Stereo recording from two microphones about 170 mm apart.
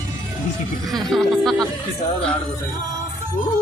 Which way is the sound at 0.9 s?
Centre (ahead or behind).